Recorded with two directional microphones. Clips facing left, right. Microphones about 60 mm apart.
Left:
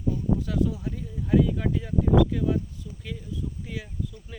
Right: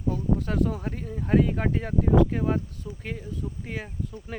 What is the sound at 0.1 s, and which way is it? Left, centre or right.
Speech, right.